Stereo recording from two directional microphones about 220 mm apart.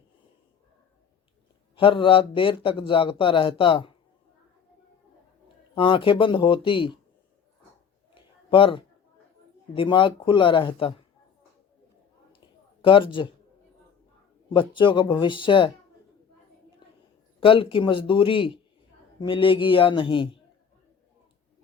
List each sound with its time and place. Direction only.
1.7 s a man's voice: 25° left (ahead or behind)
5.7 s a man's voice: 25° left (ahead or behind)
8.1 s a sound: 25° left (ahead or behind)
9.7 s a man's voice: 20° left (ahead or behind)
12.8 s a man's voice: 25° left (ahead or behind)
14.5 s a man's voice: 20° left (ahead or behind)
17.4 s a man's voice: 25° left (ahead or behind)